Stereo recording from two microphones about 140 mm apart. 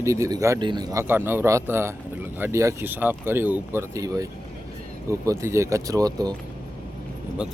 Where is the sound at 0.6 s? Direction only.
35° right (ahead or behind).